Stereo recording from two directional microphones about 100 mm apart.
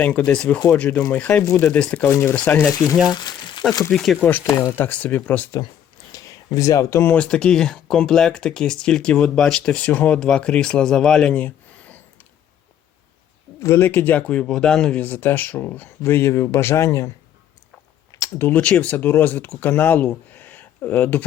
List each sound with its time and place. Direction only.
0.0 s speech: 15° left (ahead or behind)
2.0 s speech: 20° left (ahead or behind)
2.7 s speech: 35° left (ahead or behind)
3.1 s a sound: 45° left (ahead or behind)
3.9 s speech: centre (ahead or behind)
4.5 s speech: 20° left (ahead or behind)
6.1 s speech: 35° left (ahead or behind)
7.2 s speech: 10° left (ahead or behind)
13.6 s speech: 25° left (ahead or behind)
18.2 s speech: 20° left (ahead or behind)